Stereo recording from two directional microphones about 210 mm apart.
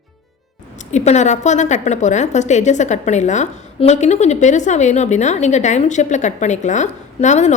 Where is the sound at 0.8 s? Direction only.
35° left (ahead or behind).